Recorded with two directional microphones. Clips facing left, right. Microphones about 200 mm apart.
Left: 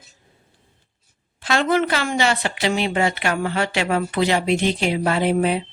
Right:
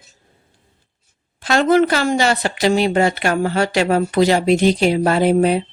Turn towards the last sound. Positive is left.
turn(degrees=-40)  # may be behind; listen again after turning